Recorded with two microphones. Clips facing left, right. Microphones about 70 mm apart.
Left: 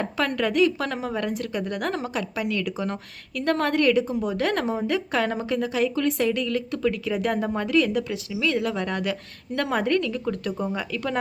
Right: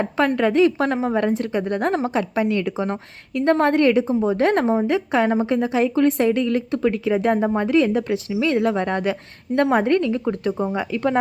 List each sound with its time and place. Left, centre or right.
0.0 s a woman's voice: right